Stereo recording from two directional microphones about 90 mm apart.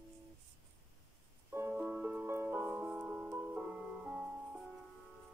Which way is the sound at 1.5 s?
25° right (ahead or behind).